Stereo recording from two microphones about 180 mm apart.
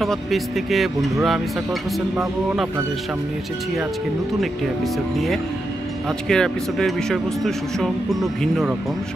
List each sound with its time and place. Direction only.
0.0 s speech: centre (ahead or behind)
6.0 s speech: 5° left (ahead or behind)